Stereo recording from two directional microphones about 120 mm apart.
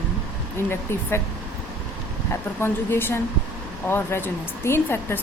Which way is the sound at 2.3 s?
20° left (ahead or behind).